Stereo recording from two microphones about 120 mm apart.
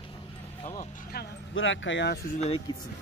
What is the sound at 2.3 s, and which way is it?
Speech, 55° left (ahead or behind).